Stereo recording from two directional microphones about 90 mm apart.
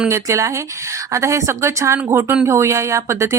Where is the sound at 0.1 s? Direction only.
35° right (ahead or behind).